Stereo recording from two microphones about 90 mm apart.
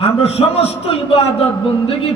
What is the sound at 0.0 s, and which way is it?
A man's voice, 90° left.